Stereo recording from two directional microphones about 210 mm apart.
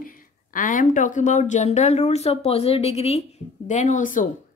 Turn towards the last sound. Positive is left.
turn(degrees=35)  # may be behind; listen again after turning